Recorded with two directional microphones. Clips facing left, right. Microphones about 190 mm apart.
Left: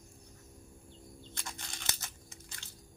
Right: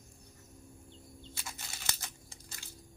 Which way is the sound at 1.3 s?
5° right (ahead or behind).